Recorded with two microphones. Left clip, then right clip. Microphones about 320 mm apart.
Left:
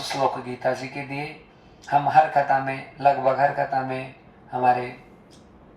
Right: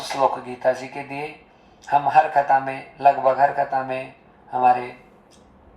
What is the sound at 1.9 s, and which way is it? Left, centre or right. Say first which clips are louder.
Speech: right 1 dB; centre.